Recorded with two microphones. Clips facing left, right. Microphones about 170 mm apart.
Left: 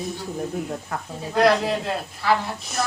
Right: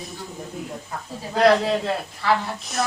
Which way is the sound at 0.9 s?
75° left (ahead or behind).